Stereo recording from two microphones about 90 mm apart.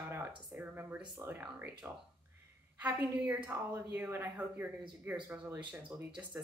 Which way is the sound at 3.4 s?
25° right (ahead or behind).